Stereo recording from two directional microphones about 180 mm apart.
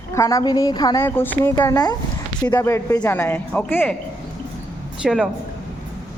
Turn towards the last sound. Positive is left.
turn(degrees=-5)  # may be behind; listen again after turning